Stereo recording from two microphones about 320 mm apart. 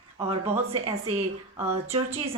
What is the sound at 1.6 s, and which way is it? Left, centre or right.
Speech, centre.